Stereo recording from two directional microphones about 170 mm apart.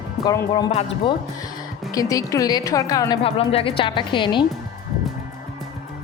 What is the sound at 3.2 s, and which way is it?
A woman's voice, 35° left (ahead or behind).